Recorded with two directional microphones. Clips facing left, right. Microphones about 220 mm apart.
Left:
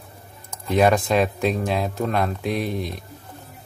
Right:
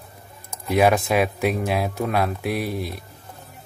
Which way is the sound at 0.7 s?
10° right (ahead or behind).